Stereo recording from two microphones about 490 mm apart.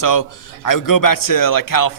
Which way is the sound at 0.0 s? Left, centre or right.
Left.